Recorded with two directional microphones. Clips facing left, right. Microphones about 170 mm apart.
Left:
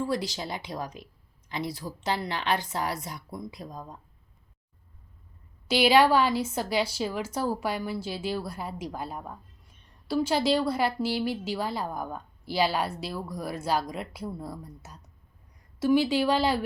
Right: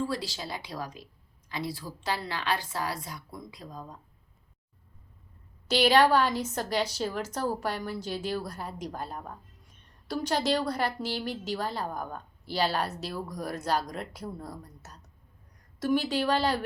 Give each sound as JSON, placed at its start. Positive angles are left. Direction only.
{"t": 0.0, "sound": "a woman's voice", "side_deg": 20}
{"t": 5.6, "sound": "a woman's voice", "side_deg": 10}